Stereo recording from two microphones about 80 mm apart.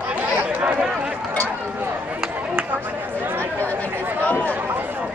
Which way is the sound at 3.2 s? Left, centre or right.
Right.